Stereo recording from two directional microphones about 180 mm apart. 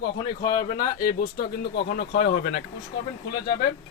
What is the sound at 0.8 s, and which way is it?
Speech, 50° left (ahead or behind).